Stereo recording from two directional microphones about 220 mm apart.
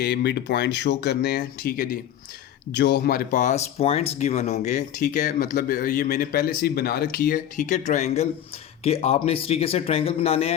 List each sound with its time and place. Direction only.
0.0 s speech: 50° left (ahead or behind); by 10.5 s 25° left (ahead or behind)